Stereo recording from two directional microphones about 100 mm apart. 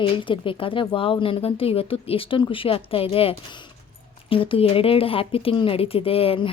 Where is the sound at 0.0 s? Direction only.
60° left (ahead or behind).